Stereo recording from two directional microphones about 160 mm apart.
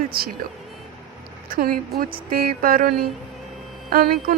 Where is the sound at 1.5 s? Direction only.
70° right (ahead or behind).